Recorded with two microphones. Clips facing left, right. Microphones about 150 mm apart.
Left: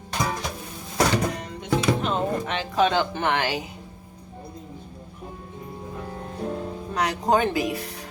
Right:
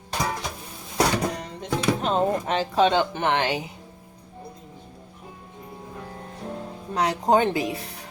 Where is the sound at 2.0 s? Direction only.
35° right (ahead or behind).